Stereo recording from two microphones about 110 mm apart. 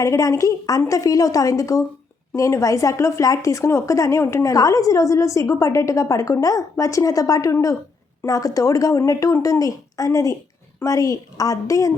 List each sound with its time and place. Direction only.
0.0 s a woman's voice: 30° left (ahead or behind)